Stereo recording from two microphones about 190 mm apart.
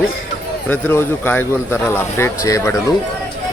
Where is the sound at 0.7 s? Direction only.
10° left (ahead or behind).